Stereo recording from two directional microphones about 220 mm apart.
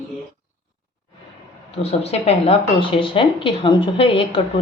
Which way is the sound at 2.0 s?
25° left (ahead or behind).